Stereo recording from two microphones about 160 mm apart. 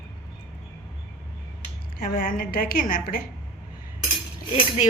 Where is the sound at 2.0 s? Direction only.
65° left (ahead or behind).